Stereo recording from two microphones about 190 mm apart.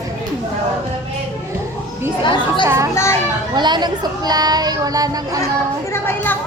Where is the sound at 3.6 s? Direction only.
20° right (ahead or behind).